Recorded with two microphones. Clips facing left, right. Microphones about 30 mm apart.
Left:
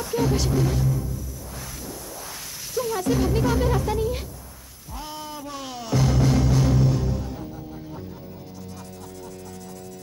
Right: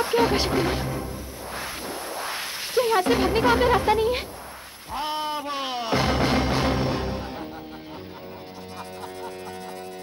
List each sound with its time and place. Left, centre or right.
0.0 s speech: right
1.9 s music: right